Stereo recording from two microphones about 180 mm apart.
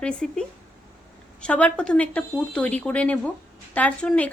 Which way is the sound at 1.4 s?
5° left (ahead or behind).